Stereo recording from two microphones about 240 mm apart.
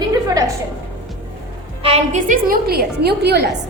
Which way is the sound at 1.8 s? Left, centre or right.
Right.